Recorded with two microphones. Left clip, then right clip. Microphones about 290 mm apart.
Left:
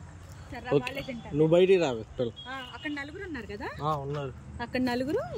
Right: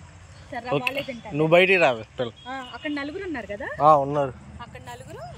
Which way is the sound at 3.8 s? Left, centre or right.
Right.